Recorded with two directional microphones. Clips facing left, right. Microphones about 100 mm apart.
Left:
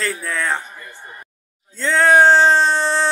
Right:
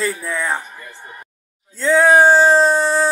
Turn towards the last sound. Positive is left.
turn(degrees=-10)  # may be behind; listen again after turning